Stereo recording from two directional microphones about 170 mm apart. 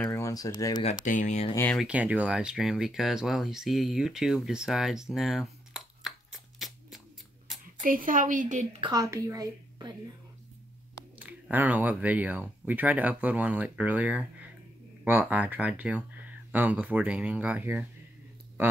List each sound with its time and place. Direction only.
0.0 s speech: 15° left (ahead or behind)
1.0 s speech: 45° left (ahead or behind)
1.7 s speech: 5° right (ahead or behind)
7.4 s a sound: centre (ahead or behind)
7.8 s a woman's voice: 55° right (ahead or behind)
8.8 s a woman's voice: 20° right (ahead or behind)
11.1 s speech: 10° right (ahead or behind)